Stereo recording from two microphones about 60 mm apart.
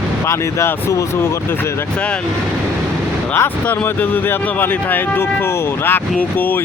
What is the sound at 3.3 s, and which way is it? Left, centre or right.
Speech, left.